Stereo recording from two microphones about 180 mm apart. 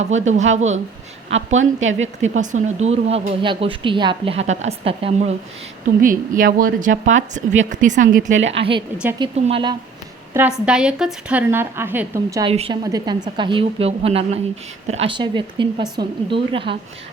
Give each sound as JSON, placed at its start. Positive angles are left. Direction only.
{"t": 0.2, "sound": "speech", "side_deg": -40}
{"t": 1.5, "sound": "a woman's voice", "side_deg": -90}
{"t": 2.2, "sound": "speech", "side_deg": -45}
{"t": 6.0, "sound": "speech", "side_deg": -50}
{"t": 8.3, "sound": "a woman's voice", "side_deg": -90}
{"t": 9.1, "sound": "speech", "side_deg": -25}
{"t": 10.3, "sound": "a woman's voice", "side_deg": -5}
{"t": 12.5, "sound": "speech", "side_deg": -30}
{"t": 12.8, "sound": "speech", "side_deg": -20}